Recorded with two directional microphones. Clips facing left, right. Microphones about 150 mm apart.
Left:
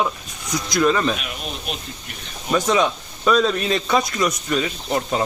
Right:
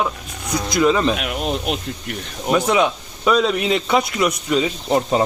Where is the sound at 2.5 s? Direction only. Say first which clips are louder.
Right 2 dB; 10° right (ahead or behind).